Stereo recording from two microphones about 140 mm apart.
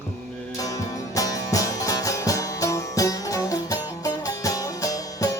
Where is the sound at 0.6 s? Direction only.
25° left (ahead or behind).